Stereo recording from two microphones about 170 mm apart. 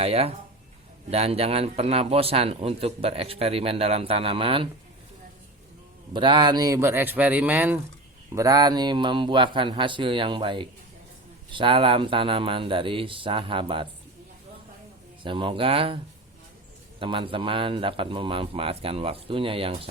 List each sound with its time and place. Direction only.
0.0 s speech: 35° right (ahead or behind)
6.1 s speech: 25° right (ahead or behind); by 7.8 s 10° right (ahead or behind)
8.4 s speech: 20° right (ahead or behind)
15.2 s speech: 30° right (ahead or behind)
17.0 s speech: 30° right (ahead or behind)